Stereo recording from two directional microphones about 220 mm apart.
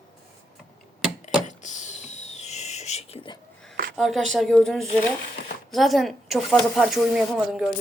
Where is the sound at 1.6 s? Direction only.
30° left (ahead or behind).